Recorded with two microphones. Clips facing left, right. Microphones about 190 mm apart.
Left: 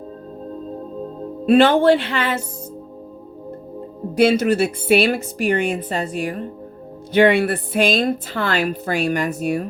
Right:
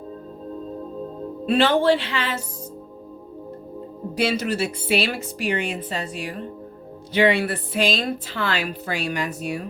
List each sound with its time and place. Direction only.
1.5 s a woman's voice: 50° left (ahead or behind)
4.1 s a woman's voice: 50° left (ahead or behind)